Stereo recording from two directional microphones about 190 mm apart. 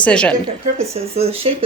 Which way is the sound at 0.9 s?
30° right (ahead or behind).